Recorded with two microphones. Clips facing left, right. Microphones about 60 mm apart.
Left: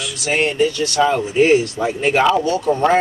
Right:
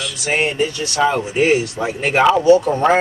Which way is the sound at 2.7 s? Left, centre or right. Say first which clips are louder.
Even; centre.